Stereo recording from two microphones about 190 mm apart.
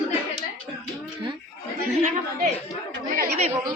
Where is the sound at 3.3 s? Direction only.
35° right (ahead or behind).